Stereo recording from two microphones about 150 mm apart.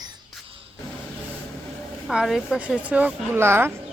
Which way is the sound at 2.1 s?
Centre (ahead or behind).